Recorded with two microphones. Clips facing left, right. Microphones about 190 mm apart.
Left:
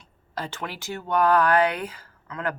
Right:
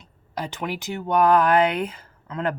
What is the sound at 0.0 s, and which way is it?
Speech, 15° right (ahead or behind).